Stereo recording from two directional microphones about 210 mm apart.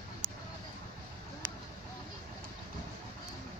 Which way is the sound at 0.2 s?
25° right (ahead or behind).